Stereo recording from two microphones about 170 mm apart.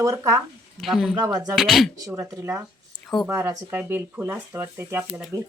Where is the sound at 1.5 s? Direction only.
Centre (ahead or behind).